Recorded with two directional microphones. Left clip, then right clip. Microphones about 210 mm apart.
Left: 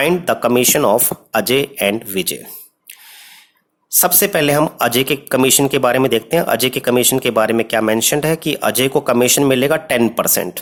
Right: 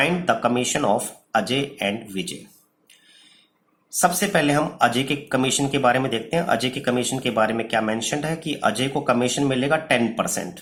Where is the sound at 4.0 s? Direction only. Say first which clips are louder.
Left 4 dB; 50° left (ahead or behind).